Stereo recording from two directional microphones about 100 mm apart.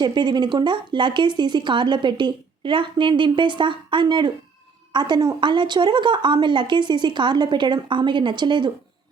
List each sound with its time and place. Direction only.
0.0 s speech: 50° right (ahead or behind)